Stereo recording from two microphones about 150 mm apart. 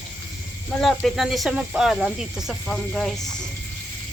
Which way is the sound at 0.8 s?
Centre (ahead or behind).